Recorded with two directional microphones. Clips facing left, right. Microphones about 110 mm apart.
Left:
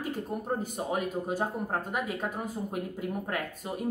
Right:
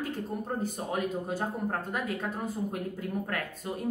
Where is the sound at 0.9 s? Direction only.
10° left (ahead or behind).